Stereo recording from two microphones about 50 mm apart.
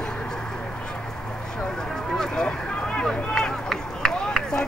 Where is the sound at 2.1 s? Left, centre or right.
Centre.